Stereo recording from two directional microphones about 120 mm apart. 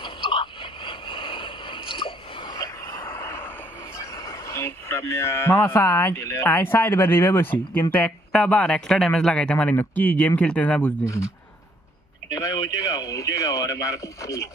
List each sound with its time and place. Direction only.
0.0 s a sound: 45° left (ahead or behind); by 3.5 s 20° left (ahead or behind)
4.0 s speech: 30° left (ahead or behind)
12.3 s speech: 30° left (ahead or behind)